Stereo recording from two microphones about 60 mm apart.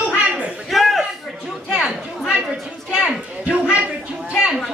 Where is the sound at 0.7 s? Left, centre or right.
Centre.